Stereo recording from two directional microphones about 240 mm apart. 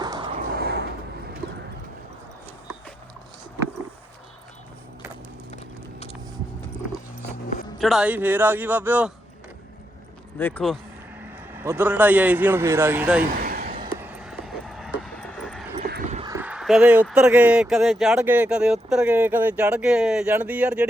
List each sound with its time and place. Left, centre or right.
0.0 s a sound: centre
0.5 s vehicle: right
7.8 s a man's voice: centre
10.3 s speech: centre
11.5 s a man's voice: centre
13.4 s a sound: right
14.0 s vehicle: centre
15.8 s a sound: right
16.2 s speech: centre